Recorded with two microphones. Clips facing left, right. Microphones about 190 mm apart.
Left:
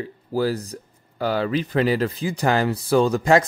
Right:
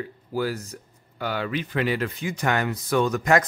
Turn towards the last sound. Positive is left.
turn(degrees=30)  # may be behind; listen again after turning